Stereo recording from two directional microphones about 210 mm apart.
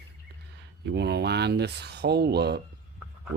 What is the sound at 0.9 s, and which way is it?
Speech, 55° right (ahead or behind).